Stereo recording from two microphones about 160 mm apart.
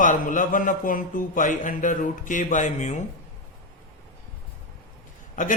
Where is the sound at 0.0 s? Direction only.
55° left (ahead or behind).